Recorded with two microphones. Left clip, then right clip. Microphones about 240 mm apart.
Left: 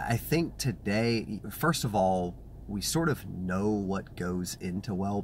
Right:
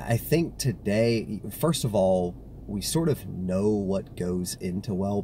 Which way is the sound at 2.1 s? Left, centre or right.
Left.